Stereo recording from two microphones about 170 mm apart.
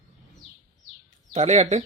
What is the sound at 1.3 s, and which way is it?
Speech, 40° right (ahead or behind).